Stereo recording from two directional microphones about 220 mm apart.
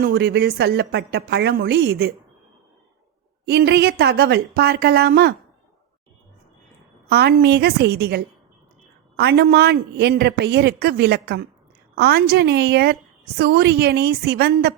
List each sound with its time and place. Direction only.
0.0 s a woman's voice: 45° right (ahead or behind)
3.4 s a woman's voice: 50° right (ahead or behind)
7.1 s a woman's voice: 45° right (ahead or behind)